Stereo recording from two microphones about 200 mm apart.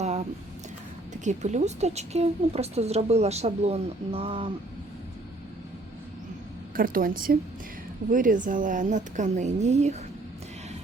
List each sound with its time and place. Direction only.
0.0 s a sound: 35° right (ahead or behind)
1.2 s a woman's voice: 35° right (ahead or behind)
6.7 s a woman's voice: 45° right (ahead or behind)